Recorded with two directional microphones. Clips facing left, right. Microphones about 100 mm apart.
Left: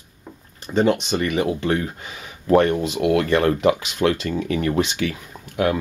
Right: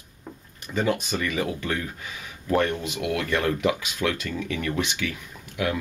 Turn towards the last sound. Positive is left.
turn(degrees=40)  # may be behind; listen again after turning